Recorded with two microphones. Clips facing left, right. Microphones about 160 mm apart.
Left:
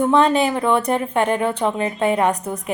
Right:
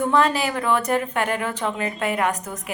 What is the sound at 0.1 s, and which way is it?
A woman's voice, 25° left (ahead or behind).